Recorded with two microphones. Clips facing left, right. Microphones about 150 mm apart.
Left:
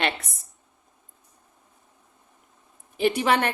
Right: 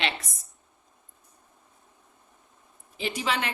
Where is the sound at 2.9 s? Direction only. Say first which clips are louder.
Left 8 dB; 55° left (ahead or behind).